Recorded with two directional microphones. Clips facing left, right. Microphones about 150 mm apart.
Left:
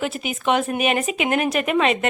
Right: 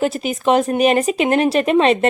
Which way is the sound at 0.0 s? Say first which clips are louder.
Right 6 dB; 35° right (ahead or behind).